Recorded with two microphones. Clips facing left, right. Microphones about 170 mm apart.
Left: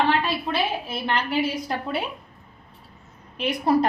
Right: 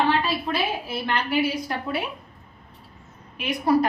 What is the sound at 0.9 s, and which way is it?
A woman's voice, 25° left (ahead or behind).